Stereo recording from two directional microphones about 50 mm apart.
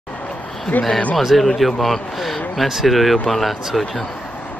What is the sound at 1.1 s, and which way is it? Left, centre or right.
Speech, centre.